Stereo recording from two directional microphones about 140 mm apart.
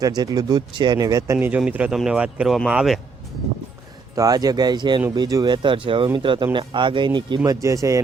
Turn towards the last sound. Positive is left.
turn(degrees=-25)  # may be behind; listen again after turning